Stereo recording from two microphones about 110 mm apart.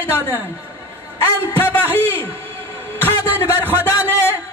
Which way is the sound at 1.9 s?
20° right (ahead or behind).